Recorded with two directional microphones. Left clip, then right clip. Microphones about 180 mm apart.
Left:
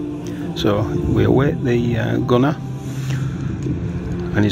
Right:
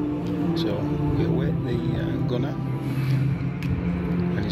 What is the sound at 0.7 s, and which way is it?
Speech, 30° left (ahead or behind).